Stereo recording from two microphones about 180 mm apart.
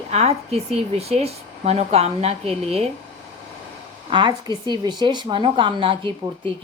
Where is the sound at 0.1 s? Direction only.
35° right (ahead or behind).